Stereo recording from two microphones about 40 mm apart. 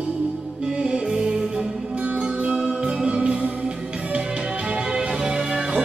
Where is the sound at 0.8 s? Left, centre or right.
Centre.